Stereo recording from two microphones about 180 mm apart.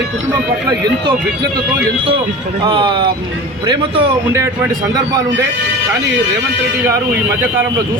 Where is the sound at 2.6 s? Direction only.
25° right (ahead or behind).